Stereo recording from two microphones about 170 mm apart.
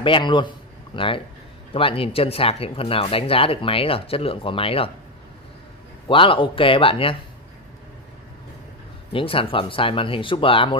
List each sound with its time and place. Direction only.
0.0 s a man's voice: 30° left (ahead or behind)
6.0 s speech: 30° left (ahead or behind)
9.1 s speech: 30° left (ahead or behind)